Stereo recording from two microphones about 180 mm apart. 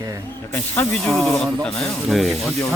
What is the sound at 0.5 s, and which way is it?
Speech, 10° left (ahead or behind).